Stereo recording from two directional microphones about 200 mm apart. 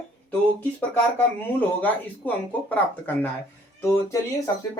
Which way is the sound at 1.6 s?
10° left (ahead or behind).